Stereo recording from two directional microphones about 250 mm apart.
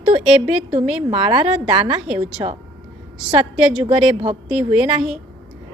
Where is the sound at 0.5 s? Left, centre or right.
Right.